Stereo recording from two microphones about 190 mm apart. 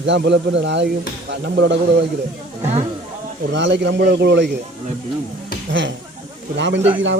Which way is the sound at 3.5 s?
70° right (ahead or behind).